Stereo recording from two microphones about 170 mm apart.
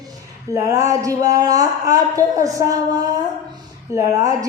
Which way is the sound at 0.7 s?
20° right (ahead or behind).